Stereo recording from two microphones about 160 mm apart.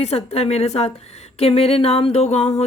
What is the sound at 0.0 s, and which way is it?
Speech, 40° left (ahead or behind).